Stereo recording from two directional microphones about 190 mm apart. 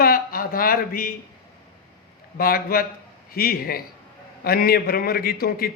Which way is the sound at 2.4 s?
50° left (ahead or behind).